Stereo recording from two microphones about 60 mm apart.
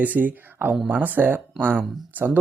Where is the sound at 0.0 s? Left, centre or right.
Right.